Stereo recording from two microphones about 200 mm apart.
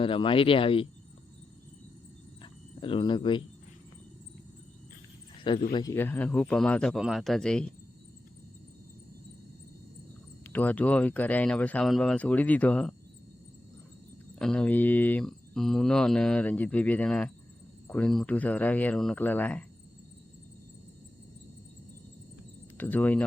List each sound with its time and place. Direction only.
0.0 s speech: 25° left (ahead or behind)
2.4 s cricket: 25° left (ahead or behind)
5.4 s a sound: 25° left (ahead or behind)
5.7 s cricket: 15° left (ahead or behind)
10.4 s speech: 10° left (ahead or behind)
14.3 s cricket: 5° left (ahead or behind)
17.8 s speech: 5° left (ahead or behind)
22.8 s speech: 10° left (ahead or behind)